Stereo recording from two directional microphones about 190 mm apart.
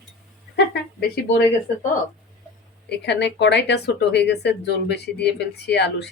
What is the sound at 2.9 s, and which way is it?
Speech, 65° left (ahead or behind).